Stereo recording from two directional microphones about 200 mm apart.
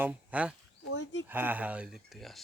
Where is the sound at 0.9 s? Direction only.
65° left (ahead or behind).